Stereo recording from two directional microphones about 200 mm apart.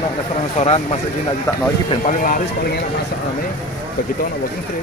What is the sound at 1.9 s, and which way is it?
Speech, 40° left (ahead or behind).